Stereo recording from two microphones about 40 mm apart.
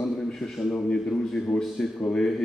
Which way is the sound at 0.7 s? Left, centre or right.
Centre.